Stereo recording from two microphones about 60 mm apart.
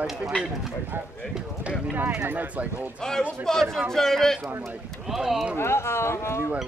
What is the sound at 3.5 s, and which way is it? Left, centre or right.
Speech, centre.